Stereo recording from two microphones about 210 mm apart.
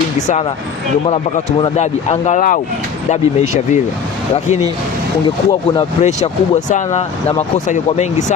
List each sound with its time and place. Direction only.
1.0 s speech: 25° left (ahead or behind)
5.5 s speech: 20° left (ahead or behind)
6.0 s speech: 35° left (ahead or behind)